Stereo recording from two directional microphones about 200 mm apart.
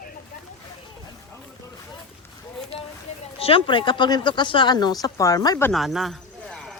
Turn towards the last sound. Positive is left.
turn(degrees=0)  # may be behind; listen again after turning